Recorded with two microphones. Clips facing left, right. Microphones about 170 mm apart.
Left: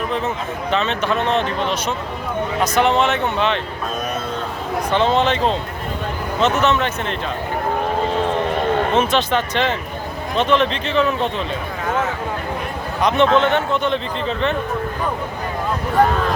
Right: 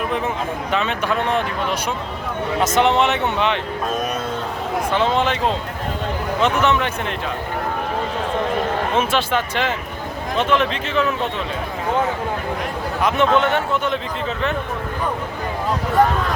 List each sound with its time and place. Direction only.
0.7 s speech: 10° right (ahead or behind)
2.6 s speech: 20° right (ahead or behind)
4.9 s speech: 10° right (ahead or behind)
6.4 s speech: 15° right (ahead or behind)
9.0 s speech: 10° right (ahead or behind)
13.0 s speech: 5° right (ahead or behind)